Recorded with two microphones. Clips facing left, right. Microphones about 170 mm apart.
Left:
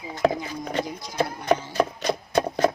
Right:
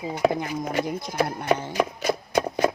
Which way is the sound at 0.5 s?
10° right (ahead or behind).